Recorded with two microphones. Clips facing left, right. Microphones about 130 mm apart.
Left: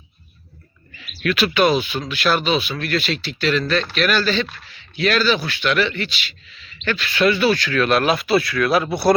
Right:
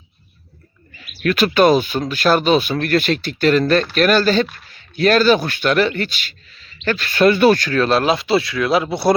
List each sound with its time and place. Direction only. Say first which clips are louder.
0.9 s speech: right 3 dB; 40° right (ahead or behind)
7.8 s speech: right 2 dB; 30° right (ahead or behind)